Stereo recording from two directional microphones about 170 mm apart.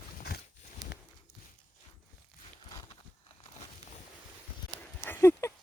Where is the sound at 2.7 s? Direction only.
25° left (ahead or behind).